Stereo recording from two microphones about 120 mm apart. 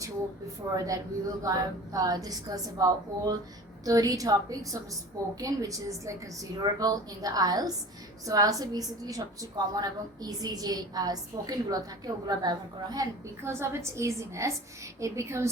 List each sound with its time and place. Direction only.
0.9 s a woman's voice: 30° right (ahead or behind)
13.4 s a woman's voice: 20° right (ahead or behind)